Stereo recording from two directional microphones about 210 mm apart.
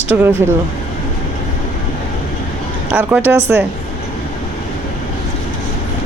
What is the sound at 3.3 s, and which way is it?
Speech, 10° right (ahead or behind).